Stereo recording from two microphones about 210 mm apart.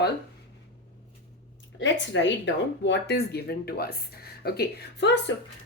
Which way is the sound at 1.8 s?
60° left (ahead or behind).